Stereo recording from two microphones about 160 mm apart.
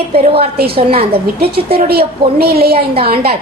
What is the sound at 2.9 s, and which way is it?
Speech, 35° right (ahead or behind).